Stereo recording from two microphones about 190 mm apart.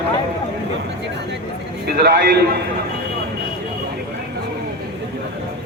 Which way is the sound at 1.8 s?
55° right (ahead or behind).